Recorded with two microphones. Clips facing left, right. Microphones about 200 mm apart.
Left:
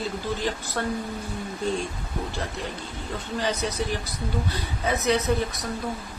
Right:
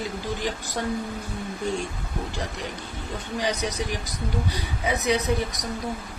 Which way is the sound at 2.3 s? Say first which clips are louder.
Even; 15° right (ahead or behind).